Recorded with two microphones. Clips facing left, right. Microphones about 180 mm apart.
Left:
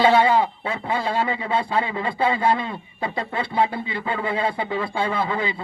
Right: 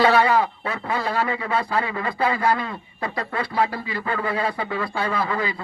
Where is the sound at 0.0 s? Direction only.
25° left (ahead or behind).